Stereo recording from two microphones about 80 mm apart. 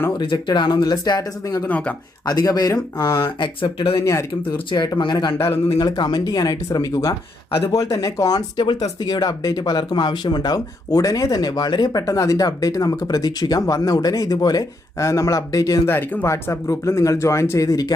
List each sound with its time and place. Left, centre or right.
0.2 s speech: left
3.9 s speech: left
4.5 s speech: left
15.9 s speech: left